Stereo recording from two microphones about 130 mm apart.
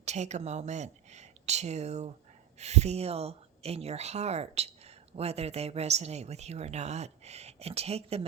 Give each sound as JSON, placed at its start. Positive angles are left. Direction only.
{"t": 0.0, "sound": "speech", "side_deg": -60}